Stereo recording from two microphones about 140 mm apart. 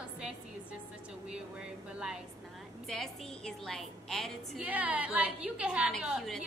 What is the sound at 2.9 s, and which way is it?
A woman's voice, centre (ahead or behind).